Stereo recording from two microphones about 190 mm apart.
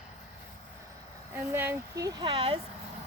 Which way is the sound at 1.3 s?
10° right (ahead or behind).